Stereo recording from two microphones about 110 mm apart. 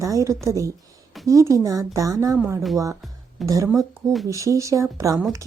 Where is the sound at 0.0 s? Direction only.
30° right (ahead or behind).